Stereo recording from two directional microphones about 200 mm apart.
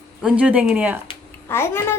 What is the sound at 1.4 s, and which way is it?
Speech, 10° left (ahead or behind).